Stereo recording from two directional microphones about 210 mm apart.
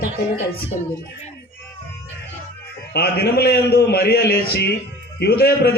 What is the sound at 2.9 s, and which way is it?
Speech, 50° left (ahead or behind).